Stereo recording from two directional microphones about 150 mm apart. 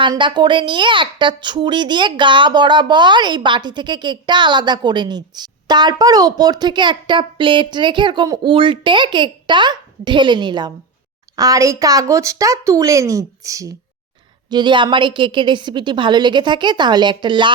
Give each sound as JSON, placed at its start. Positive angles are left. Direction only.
{"t": 0.0, "sound": "speech", "side_deg": -30}